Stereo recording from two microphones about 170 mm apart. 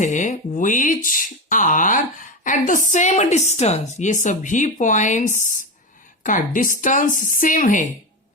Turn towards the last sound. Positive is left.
turn(degrees=50)  # may be behind; listen again after turning